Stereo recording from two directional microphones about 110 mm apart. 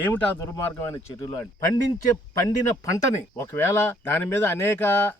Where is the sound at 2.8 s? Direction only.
30° left (ahead or behind).